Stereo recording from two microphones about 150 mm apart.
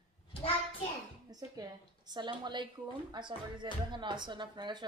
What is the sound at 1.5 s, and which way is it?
A woman's voice, 25° right (ahead or behind).